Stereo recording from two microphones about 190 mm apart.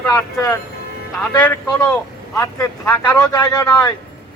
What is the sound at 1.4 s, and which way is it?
A man's voice, 5° left (ahead or behind).